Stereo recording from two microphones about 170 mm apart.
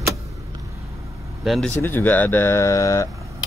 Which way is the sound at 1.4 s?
Centre (ahead or behind).